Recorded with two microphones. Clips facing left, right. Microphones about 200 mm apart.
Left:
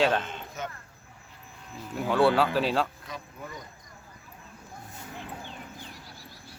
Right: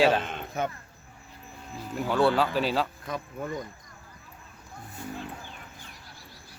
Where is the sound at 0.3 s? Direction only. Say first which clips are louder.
Right 6 dB; 55° right (ahead or behind).